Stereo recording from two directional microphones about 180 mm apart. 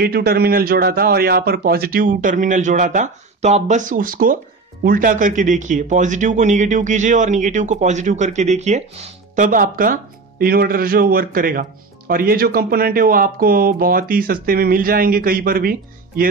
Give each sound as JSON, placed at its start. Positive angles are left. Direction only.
{"t": 0.0, "sound": "speech", "side_deg": -60}